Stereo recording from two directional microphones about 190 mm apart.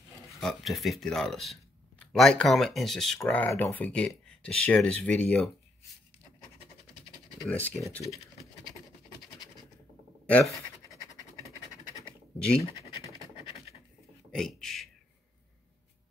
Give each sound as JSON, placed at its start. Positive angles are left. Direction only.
{"t": 0.4, "sound": "speech", "side_deg": 0}
{"t": 7.4, "sound": "speech", "side_deg": 5}
{"t": 10.2, "sound": "pant", "side_deg": 5}
{"t": 12.5, "sound": "scratch", "side_deg": -15}
{"t": 14.3, "sound": "speech", "side_deg": 0}